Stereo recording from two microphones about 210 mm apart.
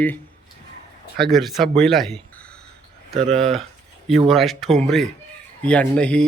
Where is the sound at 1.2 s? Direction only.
Centre (ahead or behind).